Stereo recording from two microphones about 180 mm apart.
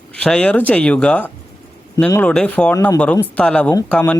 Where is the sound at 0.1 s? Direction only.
5° left (ahead or behind).